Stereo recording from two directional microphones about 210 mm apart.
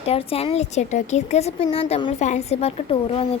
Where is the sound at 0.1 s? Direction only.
30° left (ahead or behind).